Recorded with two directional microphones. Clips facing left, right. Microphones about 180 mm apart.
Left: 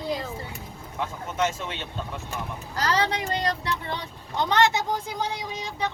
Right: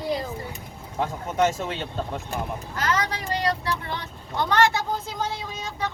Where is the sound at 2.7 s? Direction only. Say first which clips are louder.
Left 2 dB; 35° left (ahead or behind); by 5.9 s 15° left (ahead or behind).